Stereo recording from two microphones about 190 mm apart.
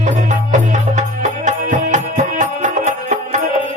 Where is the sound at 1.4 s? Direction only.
40° right (ahead or behind).